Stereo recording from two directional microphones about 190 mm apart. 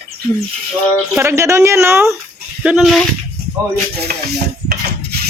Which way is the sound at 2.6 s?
Centre (ahead or behind).